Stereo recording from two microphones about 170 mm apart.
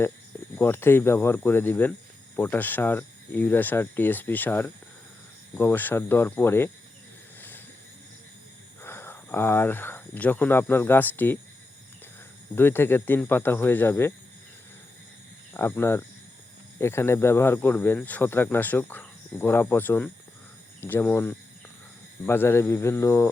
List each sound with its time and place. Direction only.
0.5 s speech: 15° left (ahead or behind)
8.8 s speech: 15° left (ahead or behind)
12.5 s speech: 15° left (ahead or behind)
15.5 s speech: 15° left (ahead or behind)